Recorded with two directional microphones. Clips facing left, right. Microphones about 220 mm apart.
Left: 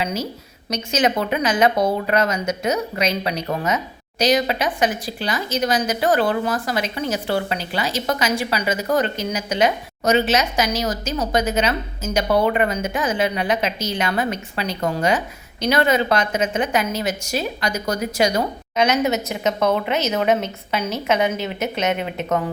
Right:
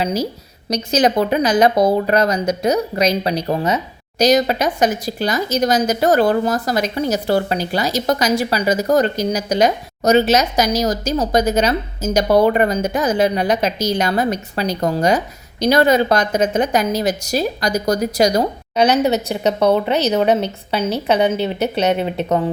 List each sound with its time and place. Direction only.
0.0 s speech: 35° right (ahead or behind)
4.2 s speech: 40° right (ahead or behind)